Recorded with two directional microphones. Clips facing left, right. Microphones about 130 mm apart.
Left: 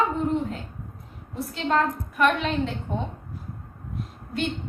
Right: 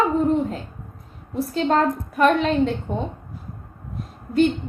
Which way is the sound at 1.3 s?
35° right (ahead or behind).